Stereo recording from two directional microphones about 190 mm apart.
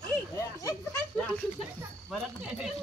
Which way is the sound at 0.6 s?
20° left (ahead or behind).